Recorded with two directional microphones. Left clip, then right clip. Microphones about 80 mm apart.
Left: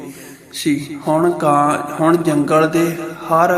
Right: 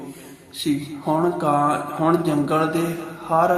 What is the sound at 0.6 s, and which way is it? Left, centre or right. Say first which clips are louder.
A man's voice: left 5 dB; left.